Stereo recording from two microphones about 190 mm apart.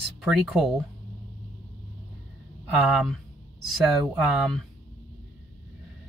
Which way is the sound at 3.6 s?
Centre (ahead or behind).